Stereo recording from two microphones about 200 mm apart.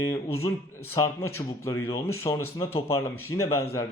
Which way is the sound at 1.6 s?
15° left (ahead or behind).